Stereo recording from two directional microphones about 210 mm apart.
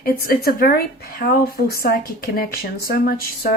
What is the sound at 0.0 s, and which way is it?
Speech, 45° left (ahead or behind).